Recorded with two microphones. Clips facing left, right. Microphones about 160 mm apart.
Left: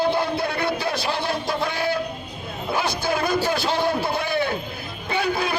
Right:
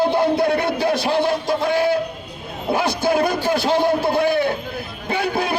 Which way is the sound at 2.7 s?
50° right (ahead or behind).